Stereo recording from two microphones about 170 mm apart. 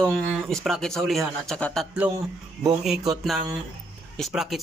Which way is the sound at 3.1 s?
Centre (ahead or behind).